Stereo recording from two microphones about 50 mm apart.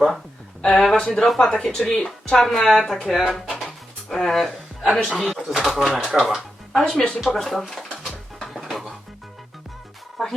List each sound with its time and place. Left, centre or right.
0.6 s speech: centre
7.9 s a sound: centre
8.4 s music: centre
10.2 s music: centre